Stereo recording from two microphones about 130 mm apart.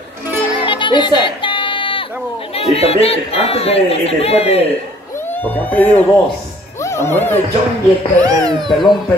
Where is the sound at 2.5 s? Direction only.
50° left (ahead or behind).